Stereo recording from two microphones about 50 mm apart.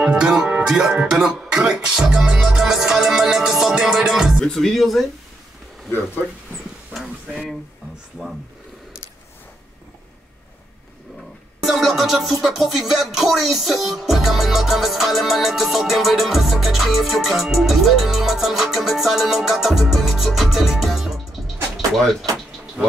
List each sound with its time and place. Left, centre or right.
0.0 s speech: centre
0.7 s music: centre
4.5 s music: centre
7.0 s a sound: centre
11.6 s music: centre